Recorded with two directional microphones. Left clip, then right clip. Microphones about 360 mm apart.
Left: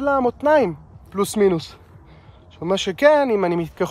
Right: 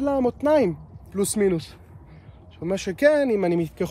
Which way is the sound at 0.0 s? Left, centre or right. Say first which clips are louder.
Left 4 dB; centre.